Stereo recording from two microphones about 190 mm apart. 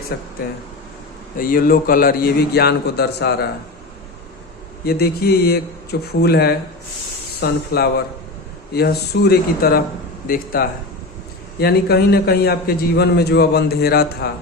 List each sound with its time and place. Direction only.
0.1 s a man's voice: 55° left (ahead or behind)
1.4 s a man's voice: 50° left (ahead or behind)
4.9 s a man's voice: 55° left (ahead or behind)